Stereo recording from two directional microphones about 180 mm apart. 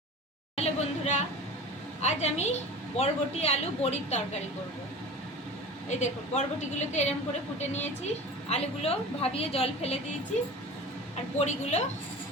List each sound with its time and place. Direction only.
0.5 s a woman's voice: 35° left (ahead or behind)
5.9 s a woman's voice: 40° left (ahead or behind)
11.3 s a woman's voice: 40° left (ahead or behind)